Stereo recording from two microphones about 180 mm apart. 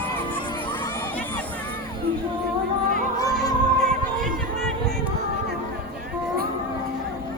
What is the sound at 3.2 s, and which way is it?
Music, 20° left (ahead or behind).